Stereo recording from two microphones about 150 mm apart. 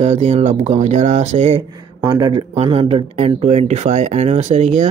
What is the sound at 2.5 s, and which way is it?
Speech, 40° right (ahead or behind).